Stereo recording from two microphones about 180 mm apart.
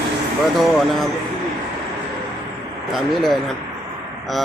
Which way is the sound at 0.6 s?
Centre (ahead or behind).